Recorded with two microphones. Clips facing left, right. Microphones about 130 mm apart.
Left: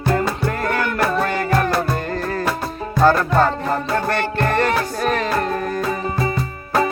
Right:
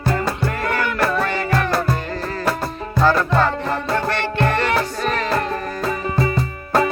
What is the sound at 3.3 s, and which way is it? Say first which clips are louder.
Music: left 2 dB; 45° left (ahead or behind).